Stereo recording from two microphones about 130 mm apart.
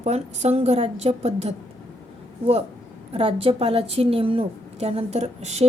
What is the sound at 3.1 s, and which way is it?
A woman's voice, 45° right (ahead or behind).